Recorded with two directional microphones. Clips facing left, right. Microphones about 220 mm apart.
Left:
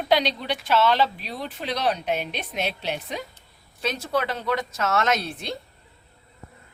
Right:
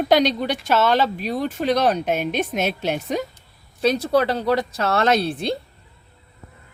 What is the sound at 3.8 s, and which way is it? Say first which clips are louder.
A woman's voice: right 8 dB; 35° right (ahead or behind).